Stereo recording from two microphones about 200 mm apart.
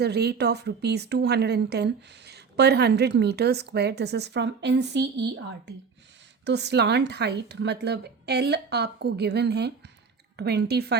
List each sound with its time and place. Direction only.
0.0 s speech: 55° right (ahead or behind)
6.4 s speech: 60° right (ahead or behind)